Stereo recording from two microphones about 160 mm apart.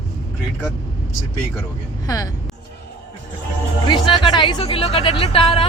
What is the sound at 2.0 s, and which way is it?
Speech, 20° left (ahead or behind).